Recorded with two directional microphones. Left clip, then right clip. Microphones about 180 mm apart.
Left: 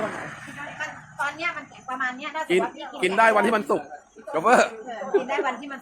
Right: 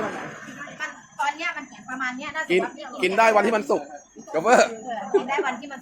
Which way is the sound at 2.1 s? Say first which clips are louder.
Right 2 dB; centre (ahead or behind).